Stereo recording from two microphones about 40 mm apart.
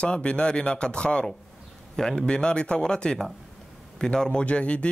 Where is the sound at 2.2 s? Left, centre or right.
Left.